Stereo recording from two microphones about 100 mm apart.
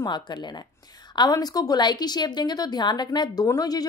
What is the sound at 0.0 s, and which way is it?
A woman's voice, 45° left (ahead or behind).